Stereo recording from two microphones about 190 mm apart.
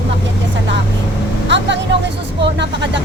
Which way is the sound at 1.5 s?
65° right (ahead or behind).